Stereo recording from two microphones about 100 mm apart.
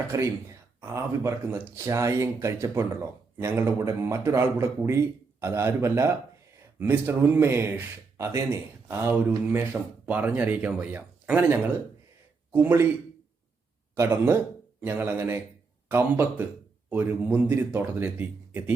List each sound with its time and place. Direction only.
0.1 s speech: 30° right (ahead or behind)
9.7 s speech: 10° right (ahead or behind)
13.9 s speech: 25° right (ahead or behind)